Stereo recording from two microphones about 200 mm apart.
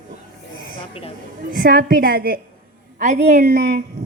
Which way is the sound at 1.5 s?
45° right (ahead or behind).